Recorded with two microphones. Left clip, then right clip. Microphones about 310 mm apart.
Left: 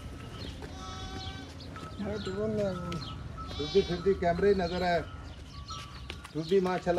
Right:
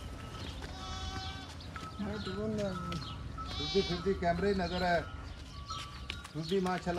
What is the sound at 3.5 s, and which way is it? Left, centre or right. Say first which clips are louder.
Speech: left 5 dB; centre.